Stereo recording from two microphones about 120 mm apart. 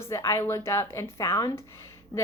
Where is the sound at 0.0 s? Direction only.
25° left (ahead or behind).